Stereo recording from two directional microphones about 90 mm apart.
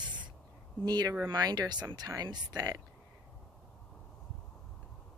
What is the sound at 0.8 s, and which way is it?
Speech, 50° right (ahead or behind).